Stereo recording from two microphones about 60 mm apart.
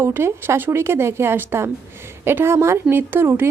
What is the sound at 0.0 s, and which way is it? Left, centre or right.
A woman's voice, right.